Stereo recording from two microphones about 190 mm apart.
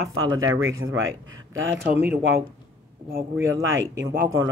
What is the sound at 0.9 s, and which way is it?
Speech, 90° right.